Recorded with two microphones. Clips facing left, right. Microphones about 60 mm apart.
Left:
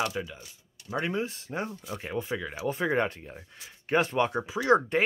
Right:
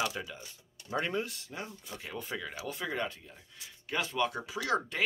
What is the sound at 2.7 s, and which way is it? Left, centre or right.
Speech, left.